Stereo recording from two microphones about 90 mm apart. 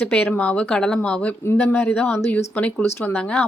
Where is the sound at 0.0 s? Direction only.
15° left (ahead or behind).